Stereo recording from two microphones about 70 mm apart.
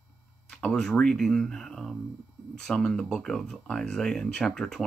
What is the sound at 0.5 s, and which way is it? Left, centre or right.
Speech, centre.